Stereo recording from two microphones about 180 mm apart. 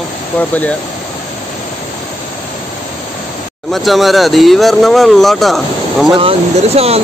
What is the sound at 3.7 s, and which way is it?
Speech, centre (ahead or behind).